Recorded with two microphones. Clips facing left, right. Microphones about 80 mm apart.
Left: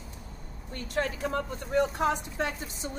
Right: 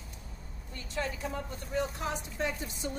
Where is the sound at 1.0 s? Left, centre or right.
Left.